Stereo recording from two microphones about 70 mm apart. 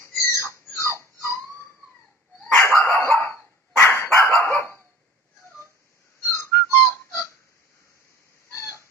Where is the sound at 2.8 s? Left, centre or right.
Left.